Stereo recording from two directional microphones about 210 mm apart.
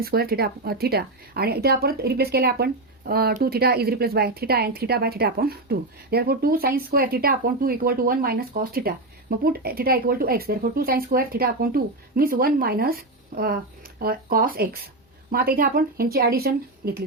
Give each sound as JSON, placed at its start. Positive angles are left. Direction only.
{"t": 0.0, "sound": "a woman's voice", "side_deg": -45}